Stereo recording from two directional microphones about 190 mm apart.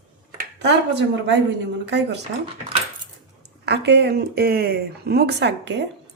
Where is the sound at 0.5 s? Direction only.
65° right (ahead or behind).